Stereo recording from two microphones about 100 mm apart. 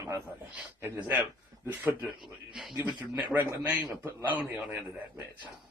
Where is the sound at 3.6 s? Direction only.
15° right (ahead or behind).